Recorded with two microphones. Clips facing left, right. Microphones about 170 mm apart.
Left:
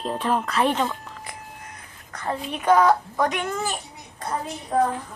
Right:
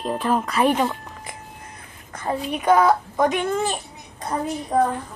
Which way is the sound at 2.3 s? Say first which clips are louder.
Right 1 dB; 10° right (ahead or behind).